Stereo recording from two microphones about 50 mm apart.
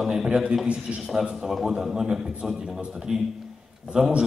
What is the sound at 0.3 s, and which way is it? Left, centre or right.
Speech, right.